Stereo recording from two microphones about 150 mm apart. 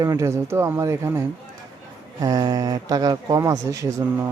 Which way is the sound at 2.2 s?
25° right (ahead or behind).